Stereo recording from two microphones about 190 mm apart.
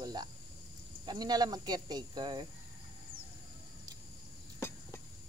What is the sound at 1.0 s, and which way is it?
Speech, 20° right (ahead or behind).